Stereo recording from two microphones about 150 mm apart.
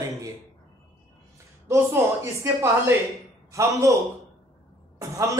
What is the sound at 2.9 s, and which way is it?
Speech, 15° right (ahead or behind).